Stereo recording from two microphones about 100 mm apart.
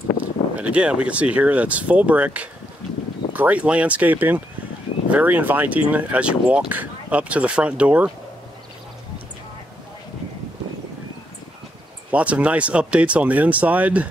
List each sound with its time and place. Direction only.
0.2 s speech: 15° right (ahead or behind)
12.1 s speech: 15° right (ahead or behind)